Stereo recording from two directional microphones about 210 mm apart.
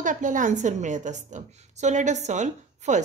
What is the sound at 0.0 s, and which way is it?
A woman's voice, 40° right (ahead or behind).